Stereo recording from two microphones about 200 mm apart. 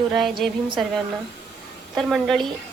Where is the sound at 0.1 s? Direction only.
Centre (ahead or behind).